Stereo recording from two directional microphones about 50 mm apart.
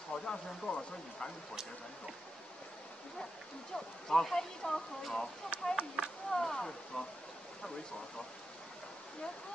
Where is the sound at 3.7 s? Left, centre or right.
Centre.